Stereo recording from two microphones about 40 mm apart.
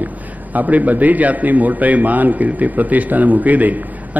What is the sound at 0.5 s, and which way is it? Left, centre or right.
A man's voice, right.